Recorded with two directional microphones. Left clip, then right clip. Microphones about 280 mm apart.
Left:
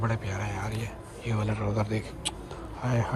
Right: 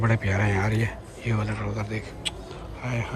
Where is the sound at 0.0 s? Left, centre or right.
Centre.